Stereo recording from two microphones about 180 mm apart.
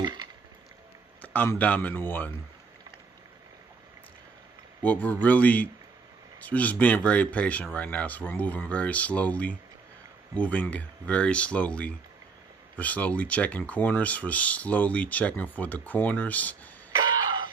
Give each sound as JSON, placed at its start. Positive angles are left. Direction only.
{"t": 0.0, "sound": "a sound", "side_deg": -25}
{"t": 1.2, "sound": "speech", "side_deg": 10}
{"t": 4.8, "sound": "speech", "side_deg": 10}
{"t": 16.9, "sound": "throat clearing", "side_deg": -25}